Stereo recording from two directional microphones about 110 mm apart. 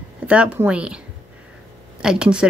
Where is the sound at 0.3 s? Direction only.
10° right (ahead or behind).